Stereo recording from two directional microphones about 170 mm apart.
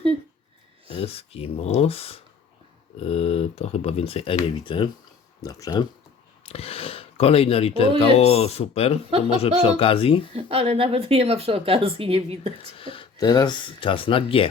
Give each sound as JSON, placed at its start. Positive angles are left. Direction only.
{"t": 0.9, "sound": "speech", "side_deg": 35}
{"t": 6.4, "sound": "speech", "side_deg": 35}
{"t": 10.3, "sound": "speech", "side_deg": -35}
{"t": 12.7, "sound": "speech", "side_deg": 30}